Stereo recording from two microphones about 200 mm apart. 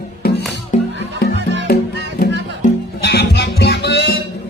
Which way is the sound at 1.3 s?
60° right (ahead or behind).